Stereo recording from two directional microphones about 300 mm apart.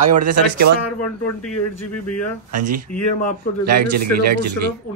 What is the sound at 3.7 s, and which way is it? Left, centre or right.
Speech, right.